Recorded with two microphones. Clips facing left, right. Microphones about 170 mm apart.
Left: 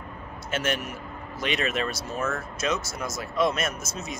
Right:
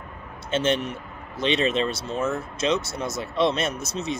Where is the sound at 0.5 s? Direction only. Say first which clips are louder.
Right 5 dB; 25° right (ahead or behind).